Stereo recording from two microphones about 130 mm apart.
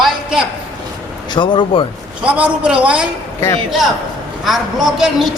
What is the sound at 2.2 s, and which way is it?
Speech, 10° right (ahead or behind).